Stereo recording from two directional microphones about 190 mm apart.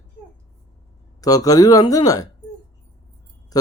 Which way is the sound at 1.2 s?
20° left (ahead or behind).